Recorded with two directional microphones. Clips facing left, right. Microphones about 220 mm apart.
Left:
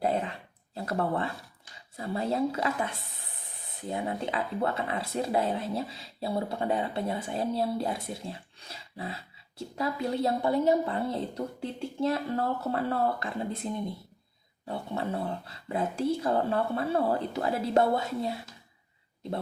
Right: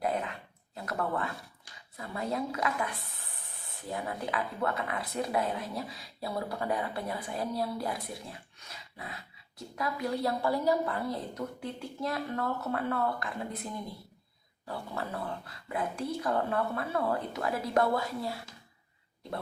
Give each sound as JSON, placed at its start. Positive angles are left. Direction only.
{"t": 0.0, "sound": "dog", "side_deg": 30}
{"t": 2.0, "sound": "speech", "side_deg": 30}